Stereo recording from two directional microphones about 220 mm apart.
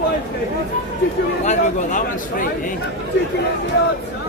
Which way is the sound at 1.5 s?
35° left (ahead or behind).